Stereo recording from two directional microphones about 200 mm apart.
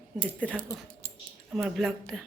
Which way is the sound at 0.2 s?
Centre (ahead or behind).